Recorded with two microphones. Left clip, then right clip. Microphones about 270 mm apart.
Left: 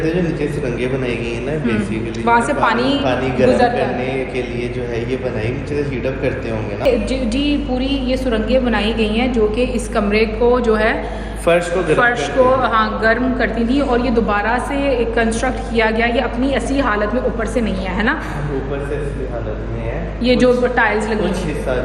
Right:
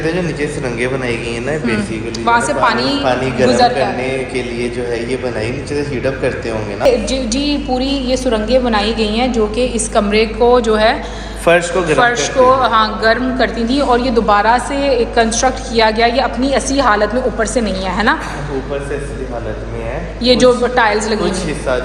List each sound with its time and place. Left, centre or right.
2.2 s a woman's voice: centre
3.0 s a man's voice: right
7.1 s a woman's voice: centre
11.5 s a man's voice: right
11.9 s a woman's voice: centre
20.2 s a woman's voice: centre